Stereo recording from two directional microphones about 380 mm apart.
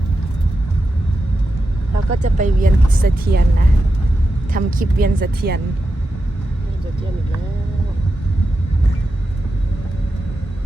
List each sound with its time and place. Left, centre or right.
2.1 s speech: centre
4.5 s speech: right